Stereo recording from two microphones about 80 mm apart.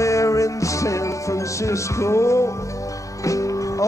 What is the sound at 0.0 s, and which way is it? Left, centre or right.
Music, left.